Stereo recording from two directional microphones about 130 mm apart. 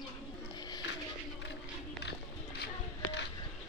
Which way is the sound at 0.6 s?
30° left (ahead or behind).